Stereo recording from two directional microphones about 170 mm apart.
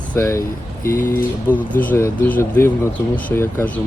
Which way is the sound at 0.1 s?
15° left (ahead or behind).